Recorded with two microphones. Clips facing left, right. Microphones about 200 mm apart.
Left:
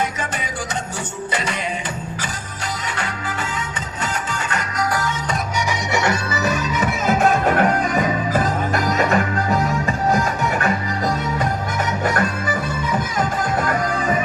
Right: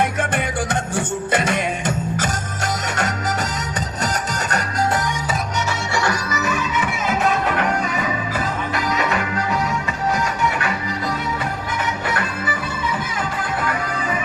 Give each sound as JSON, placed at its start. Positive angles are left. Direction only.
{"t": 0.2, "sound": "music", "side_deg": -55}
{"t": 4.0, "sound": "music", "side_deg": -40}
{"t": 5.9, "sound": "music", "side_deg": 20}
{"t": 6.4, "sound": "music", "side_deg": 40}
{"t": 12.0, "sound": "music", "side_deg": 45}